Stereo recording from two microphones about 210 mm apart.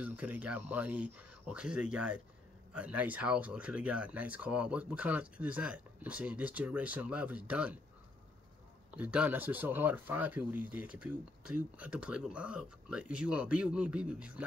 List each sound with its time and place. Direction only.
0.0 s speech: 5° right (ahead or behind)
8.9 s speech: 5° right (ahead or behind)